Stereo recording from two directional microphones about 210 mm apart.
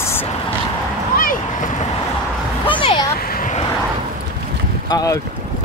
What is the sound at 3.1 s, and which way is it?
Vehicle, 45° left (ahead or behind).